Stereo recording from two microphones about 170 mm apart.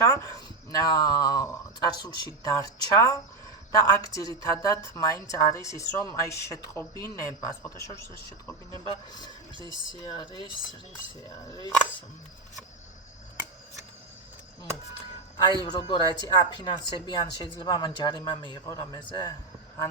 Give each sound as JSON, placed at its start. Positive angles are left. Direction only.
{"t": 0.0, "sound": "speech", "side_deg": 20}
{"t": 9.6, "sound": "speech", "side_deg": -25}
{"t": 10.0, "sound": "speech", "side_deg": 25}
{"t": 15.4, "sound": "speech", "side_deg": 25}